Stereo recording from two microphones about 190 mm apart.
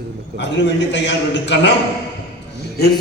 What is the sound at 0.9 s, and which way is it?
Speech, 65° left (ahead or behind).